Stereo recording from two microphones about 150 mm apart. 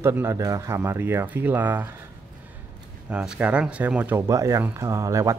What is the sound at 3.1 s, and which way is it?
Speech, 5° right (ahead or behind).